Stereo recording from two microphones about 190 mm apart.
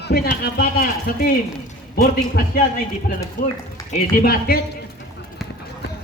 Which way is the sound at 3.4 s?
45° left (ahead or behind).